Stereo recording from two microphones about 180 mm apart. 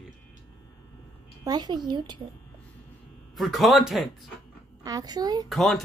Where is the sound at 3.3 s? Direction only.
Centre (ahead or behind).